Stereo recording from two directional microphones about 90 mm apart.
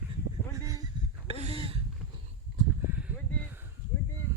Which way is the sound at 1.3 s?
90° right.